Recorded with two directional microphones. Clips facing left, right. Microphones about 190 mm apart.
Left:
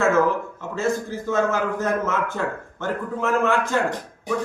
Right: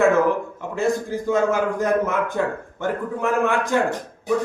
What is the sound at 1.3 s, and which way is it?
A man's voice, 15° right (ahead or behind).